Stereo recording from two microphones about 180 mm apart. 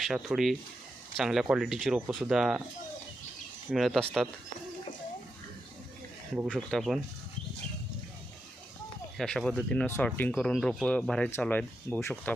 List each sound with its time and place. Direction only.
0.0 s speech: centre (ahead or behind)
3.7 s speech: centre (ahead or behind)
6.3 s speech: centre (ahead or behind)
9.1 s speech: centre (ahead or behind)